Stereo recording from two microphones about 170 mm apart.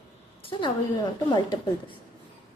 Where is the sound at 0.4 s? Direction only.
30° left (ahead or behind).